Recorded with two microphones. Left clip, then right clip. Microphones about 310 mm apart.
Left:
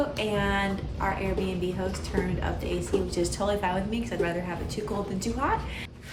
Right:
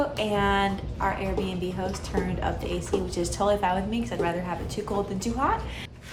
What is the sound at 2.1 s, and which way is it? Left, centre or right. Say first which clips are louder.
A woman's voice: right 3 dB; centre.